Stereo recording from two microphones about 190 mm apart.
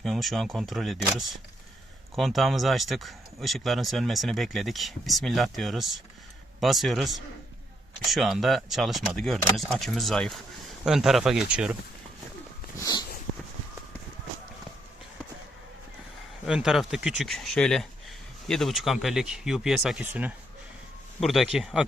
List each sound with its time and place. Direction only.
0.0 s speech: centre (ahead or behind)
2.1 s speech: centre (ahead or behind)
12.8 s a sound: 20° left (ahead or behind)
16.5 s speech: centre (ahead or behind)